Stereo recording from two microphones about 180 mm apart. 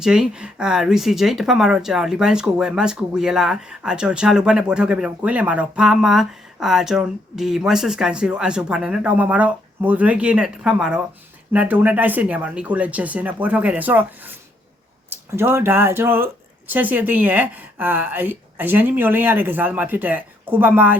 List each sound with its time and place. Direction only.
0.0 s speech: 5° right (ahead or behind)